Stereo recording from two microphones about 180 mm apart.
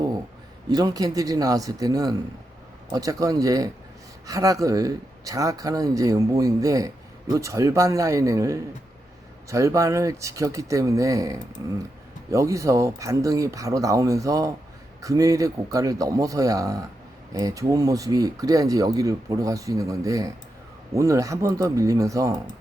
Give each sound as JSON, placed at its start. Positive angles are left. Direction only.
{"t": 0.7, "sound": "speech", "side_deg": -20}